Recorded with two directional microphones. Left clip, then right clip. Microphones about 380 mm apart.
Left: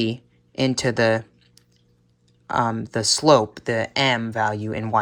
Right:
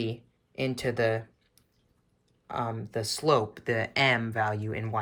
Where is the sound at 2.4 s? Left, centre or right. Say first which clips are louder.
Left 11 dB; centre.